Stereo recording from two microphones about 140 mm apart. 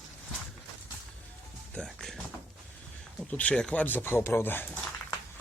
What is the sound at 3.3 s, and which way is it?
Speech, 10° left (ahead or behind).